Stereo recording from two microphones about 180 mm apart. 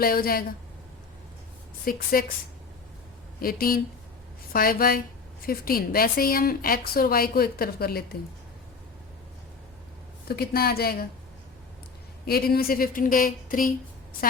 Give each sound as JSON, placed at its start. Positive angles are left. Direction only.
{"t": 0.0, "sound": "speech", "side_deg": 55}
{"t": 1.8, "sound": "speech", "side_deg": 55}
{"t": 3.4, "sound": "speech", "side_deg": 55}
{"t": 10.2, "sound": "speech", "side_deg": 60}
{"t": 12.2, "sound": "speech", "side_deg": 55}